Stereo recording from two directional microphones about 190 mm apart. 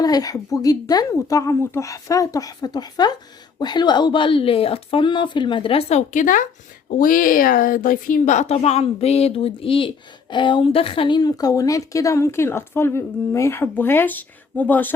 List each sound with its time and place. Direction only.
0.0 s a woman's voice: 20° left (ahead or behind)